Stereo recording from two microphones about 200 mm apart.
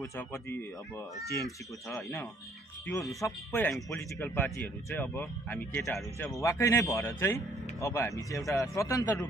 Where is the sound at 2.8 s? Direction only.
Centre (ahead or behind).